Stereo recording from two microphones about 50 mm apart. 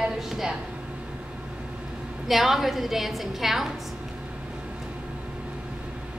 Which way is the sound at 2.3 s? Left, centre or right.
Centre.